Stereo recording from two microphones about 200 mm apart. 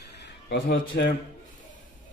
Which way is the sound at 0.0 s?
55° left (ahead or behind).